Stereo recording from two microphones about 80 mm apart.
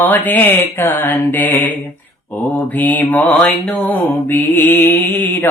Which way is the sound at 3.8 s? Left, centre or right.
Left.